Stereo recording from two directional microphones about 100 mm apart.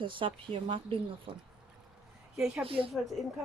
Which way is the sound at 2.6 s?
65° right (ahead or behind).